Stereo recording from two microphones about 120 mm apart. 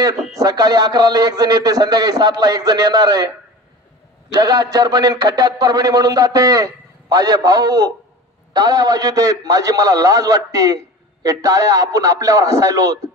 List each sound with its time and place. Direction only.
0.4 s a man's voice: 30° right (ahead or behind)
4.3 s a man's voice: 35° right (ahead or behind)